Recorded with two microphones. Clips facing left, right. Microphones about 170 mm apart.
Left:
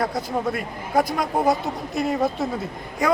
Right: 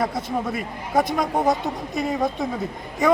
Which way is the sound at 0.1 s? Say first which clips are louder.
Even; 25° right (ahead or behind).